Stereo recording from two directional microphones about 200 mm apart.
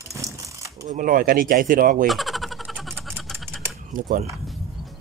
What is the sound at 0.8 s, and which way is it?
Speech, 40° right (ahead or behind).